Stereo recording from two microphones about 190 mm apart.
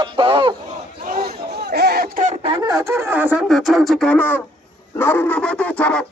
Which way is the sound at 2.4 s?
25° right (ahead or behind).